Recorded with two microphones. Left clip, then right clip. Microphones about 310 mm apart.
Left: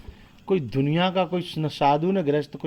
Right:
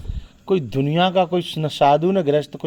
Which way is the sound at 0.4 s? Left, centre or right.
Right.